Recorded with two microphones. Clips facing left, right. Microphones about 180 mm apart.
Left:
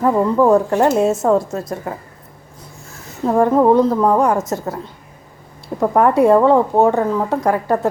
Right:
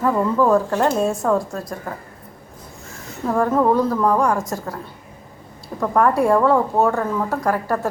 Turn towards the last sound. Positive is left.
turn(degrees=20)  # may be behind; listen again after turning